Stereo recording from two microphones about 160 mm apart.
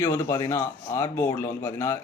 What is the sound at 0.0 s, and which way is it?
A man's voice, 15° left (ahead or behind).